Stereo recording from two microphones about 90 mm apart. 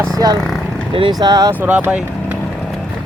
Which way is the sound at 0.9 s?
80° right.